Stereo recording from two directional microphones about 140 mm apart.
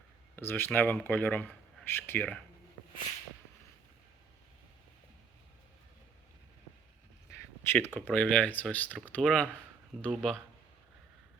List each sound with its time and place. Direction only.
0.3 s speech: 15° left (ahead or behind)
7.6 s speech: 15° left (ahead or behind)